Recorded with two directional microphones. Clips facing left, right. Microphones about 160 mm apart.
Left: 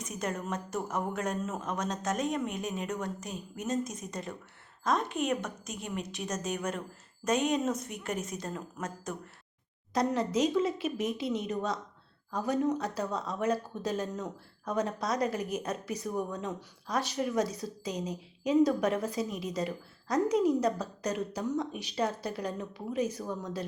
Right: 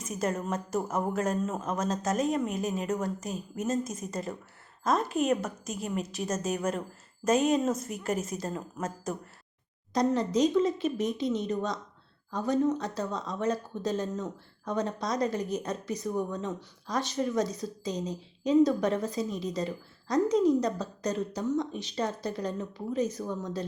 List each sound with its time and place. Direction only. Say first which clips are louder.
0.0 s a woman's voice: right 4 dB; centre (ahead or behind)
17.9 s a woman's voice: even; 30° right (ahead or behind)
18.4 s a woman's voice: right 2 dB; 10° left (ahead or behind)